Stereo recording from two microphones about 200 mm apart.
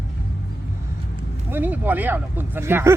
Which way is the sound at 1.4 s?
10° right (ahead or behind).